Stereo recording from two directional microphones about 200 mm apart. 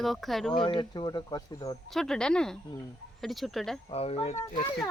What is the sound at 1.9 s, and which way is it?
Speech, 5° left (ahead or behind).